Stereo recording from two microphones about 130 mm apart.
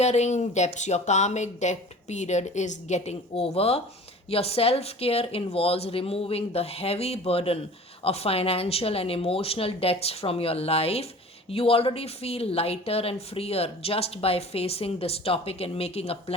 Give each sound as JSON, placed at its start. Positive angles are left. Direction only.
{"t": 0.0, "sound": "speech", "side_deg": 60}